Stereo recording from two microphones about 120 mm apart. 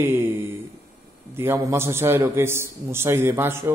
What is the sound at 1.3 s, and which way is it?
A man's voice, 20° right (ahead or behind).